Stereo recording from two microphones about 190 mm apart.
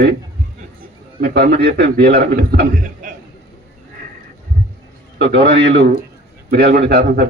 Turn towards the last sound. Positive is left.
turn(degrees=-55)  # may be behind; listen again after turning